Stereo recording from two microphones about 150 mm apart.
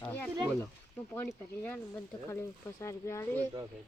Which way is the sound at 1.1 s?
15° left (ahead or behind).